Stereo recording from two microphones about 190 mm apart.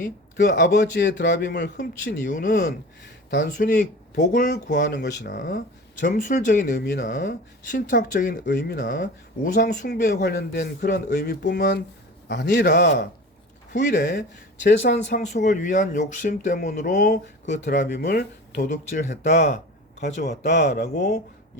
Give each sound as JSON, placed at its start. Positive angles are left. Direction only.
{"t": 0.4, "sound": "a man's voice", "side_deg": 60}
{"t": 2.3, "sound": "speech", "side_deg": 45}
{"t": 6.7, "sound": "a man's voice", "side_deg": 60}
{"t": 7.0, "sound": "speech", "side_deg": 45}
{"t": 11.1, "sound": "a man's voice", "side_deg": 50}
{"t": 14.7, "sound": "speech", "side_deg": 70}
{"t": 15.0, "sound": "speech", "side_deg": 40}
{"t": 18.0, "sound": "speech", "side_deg": 60}
{"t": 18.6, "sound": "speech", "side_deg": 40}
{"t": 20.0, "sound": "a man's voice", "side_deg": 60}